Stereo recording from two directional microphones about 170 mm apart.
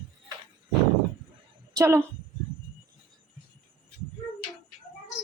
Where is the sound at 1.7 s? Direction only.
20° right (ahead or behind).